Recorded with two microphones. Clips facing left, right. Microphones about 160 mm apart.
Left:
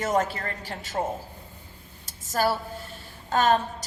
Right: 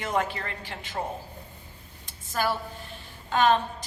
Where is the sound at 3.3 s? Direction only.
40° left (ahead or behind).